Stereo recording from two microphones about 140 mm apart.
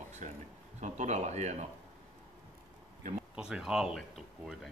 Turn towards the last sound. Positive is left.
turn(degrees=-5)  # may be behind; listen again after turning